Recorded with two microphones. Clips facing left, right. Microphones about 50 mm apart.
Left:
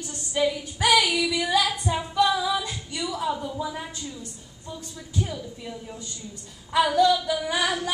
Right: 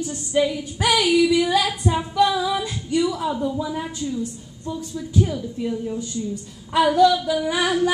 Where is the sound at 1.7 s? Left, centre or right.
Centre.